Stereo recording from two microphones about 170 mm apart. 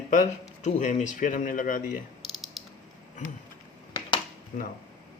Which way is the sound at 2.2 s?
Centre (ahead or behind).